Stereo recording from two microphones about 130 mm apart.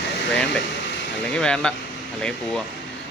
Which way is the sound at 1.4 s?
5° left (ahead or behind).